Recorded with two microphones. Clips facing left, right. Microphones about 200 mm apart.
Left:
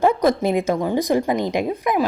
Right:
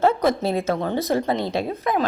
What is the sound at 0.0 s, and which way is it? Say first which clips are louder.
A woman's voice: left 2 dB; 15° left (ahead or behind).